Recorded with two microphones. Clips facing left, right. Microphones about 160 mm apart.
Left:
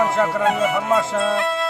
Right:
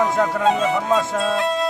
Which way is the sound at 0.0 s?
10° left (ahead or behind).